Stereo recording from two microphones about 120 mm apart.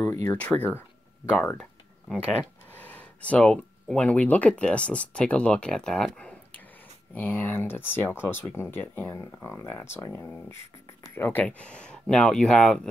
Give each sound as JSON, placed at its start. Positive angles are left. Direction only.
{"t": 0.0, "sound": "speech", "side_deg": 20}
{"t": 0.4, "sound": "speech", "side_deg": 10}
{"t": 1.3, "sound": "a sound", "side_deg": 5}
{"t": 2.8, "sound": "speech", "side_deg": 10}
{"t": 11.1, "sound": "speech", "side_deg": 15}